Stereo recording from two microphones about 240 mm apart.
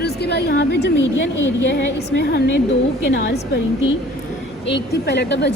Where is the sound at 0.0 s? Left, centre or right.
Left.